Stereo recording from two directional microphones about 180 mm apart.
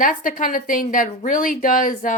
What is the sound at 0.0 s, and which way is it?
A woman's voice, 50° left (ahead or behind).